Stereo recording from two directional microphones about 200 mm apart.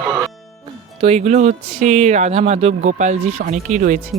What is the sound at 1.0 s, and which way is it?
Speech, 30° right (ahead or behind).